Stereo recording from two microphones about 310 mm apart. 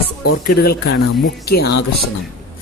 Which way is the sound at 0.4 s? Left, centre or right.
Left.